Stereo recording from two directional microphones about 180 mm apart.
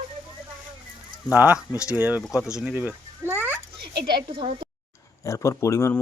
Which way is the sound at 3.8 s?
65° right (ahead or behind).